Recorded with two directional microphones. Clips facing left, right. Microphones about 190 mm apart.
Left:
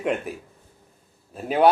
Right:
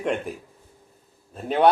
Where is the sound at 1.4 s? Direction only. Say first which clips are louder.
Left 1 dB; 5° left (ahead or behind).